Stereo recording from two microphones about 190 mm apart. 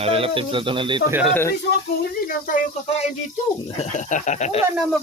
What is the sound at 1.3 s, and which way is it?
Speech, 10° left (ahead or behind).